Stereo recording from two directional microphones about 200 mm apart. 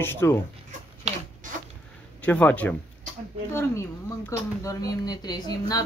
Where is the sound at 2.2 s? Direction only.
5° left (ahead or behind).